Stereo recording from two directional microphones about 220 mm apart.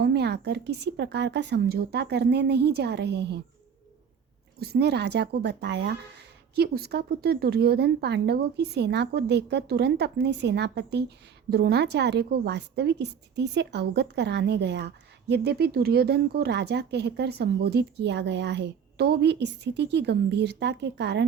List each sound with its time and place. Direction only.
0.0 s a woman's voice: 50° right (ahead or behind)
4.6 s a woman's voice: 45° right (ahead or behind)